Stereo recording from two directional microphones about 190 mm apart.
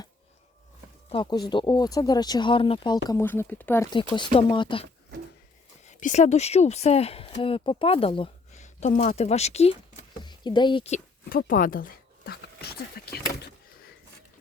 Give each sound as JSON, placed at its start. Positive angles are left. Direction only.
{"t": 1.1, "sound": "speech", "side_deg": 25}
{"t": 4.1, "sound": "speech", "side_deg": 25}
{"t": 5.9, "sound": "a woman's voice", "side_deg": 40}
{"t": 11.3, "sound": "speech", "side_deg": 50}